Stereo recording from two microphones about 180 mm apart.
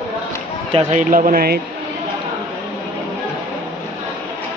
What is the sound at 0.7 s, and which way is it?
Speech, 35° right (ahead or behind).